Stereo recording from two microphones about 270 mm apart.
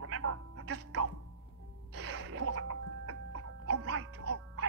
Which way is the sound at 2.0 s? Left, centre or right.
Right.